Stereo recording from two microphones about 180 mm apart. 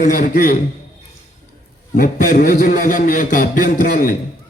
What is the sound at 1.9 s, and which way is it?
A man's voice, 50° left (ahead or behind).